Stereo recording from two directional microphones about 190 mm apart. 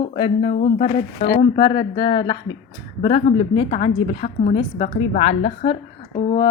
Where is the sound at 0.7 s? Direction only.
40° left (ahead or behind).